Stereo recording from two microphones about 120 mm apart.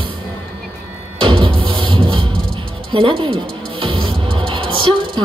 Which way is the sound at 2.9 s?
45° right (ahead or behind).